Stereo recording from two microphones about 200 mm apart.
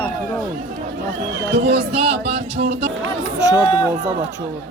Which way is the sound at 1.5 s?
30° right (ahead or behind).